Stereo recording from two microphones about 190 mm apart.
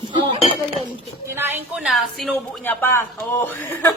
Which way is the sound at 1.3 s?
10° right (ahead or behind).